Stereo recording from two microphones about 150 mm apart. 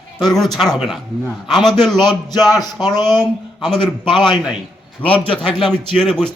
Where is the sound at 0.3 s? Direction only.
Centre (ahead or behind).